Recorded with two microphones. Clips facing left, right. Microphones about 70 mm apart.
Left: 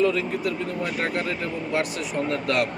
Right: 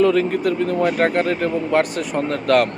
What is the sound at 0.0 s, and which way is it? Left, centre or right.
A man's voice, right.